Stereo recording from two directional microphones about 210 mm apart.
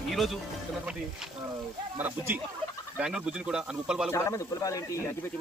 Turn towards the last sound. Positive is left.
turn(degrees=15)  # may be behind; listen again after turning